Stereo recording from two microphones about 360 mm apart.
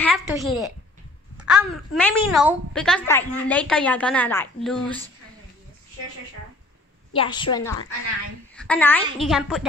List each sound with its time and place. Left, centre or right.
0.0 s a woman's voice: centre
7.2 s a woman's voice: centre